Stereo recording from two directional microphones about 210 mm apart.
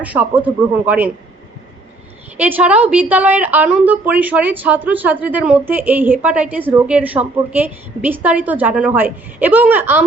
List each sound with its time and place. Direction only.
0.0 s a woman's voice: 5° right (ahead or behind)
2.4 s a woman's voice: 5° right (ahead or behind)